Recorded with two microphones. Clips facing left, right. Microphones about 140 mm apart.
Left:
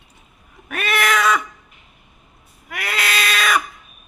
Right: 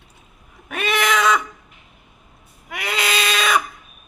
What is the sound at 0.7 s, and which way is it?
Cat, 20° right (ahead or behind).